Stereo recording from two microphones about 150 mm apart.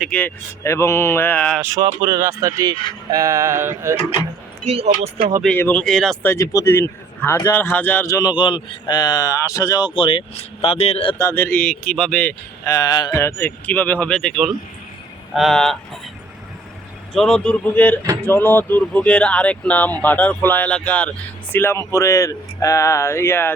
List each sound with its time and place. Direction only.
0.1 s speech: 10° left (ahead or behind)
1.6 s speech: 25° right (ahead or behind)
4.6 s speech: 45° right (ahead or behind)
5.5 s speech: 10° left (ahead or behind)
6.2 s a man's voice: 20° left (ahead or behind); by 11.2 s 40° left (ahead or behind)
11.2 s speech: 15° left (ahead or behind)
12.6 s speech: 20° left (ahead or behind); by 15.8 s centre (ahead or behind)
17.2 s speech: 5° left (ahead or behind)